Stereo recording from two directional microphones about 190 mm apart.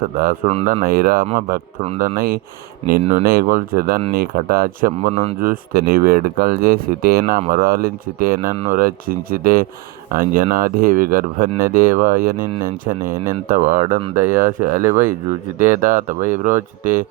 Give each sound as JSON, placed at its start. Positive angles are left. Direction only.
{"t": 0.4, "sound": "speech", "side_deg": -35}
{"t": 3.0, "sound": "speech", "side_deg": -35}
{"t": 3.2, "sound": "speech", "side_deg": -50}
{"t": 5.1, "sound": "speech", "side_deg": -30}
{"t": 5.4, "sound": "speech", "side_deg": -50}